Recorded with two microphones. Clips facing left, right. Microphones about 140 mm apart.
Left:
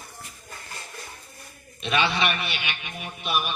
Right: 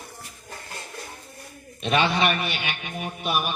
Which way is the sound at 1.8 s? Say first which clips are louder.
Right 3 dB; 45° right (ahead or behind).